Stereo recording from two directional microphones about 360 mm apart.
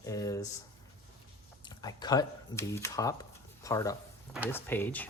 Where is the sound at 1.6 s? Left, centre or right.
Centre.